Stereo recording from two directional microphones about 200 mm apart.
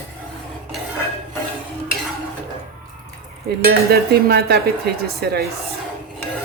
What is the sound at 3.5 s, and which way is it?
Speech, 50° right (ahead or behind).